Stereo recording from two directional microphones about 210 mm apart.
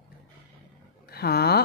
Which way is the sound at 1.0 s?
50° left (ahead or behind).